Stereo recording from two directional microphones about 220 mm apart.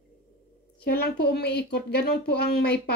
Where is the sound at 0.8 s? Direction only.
45° left (ahead or behind).